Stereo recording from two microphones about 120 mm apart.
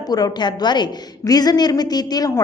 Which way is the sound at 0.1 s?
35° left (ahead or behind).